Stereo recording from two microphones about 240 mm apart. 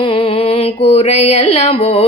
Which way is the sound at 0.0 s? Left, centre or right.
Left.